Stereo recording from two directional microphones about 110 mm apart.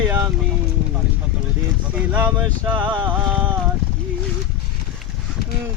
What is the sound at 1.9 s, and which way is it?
Music, 15° right (ahead or behind).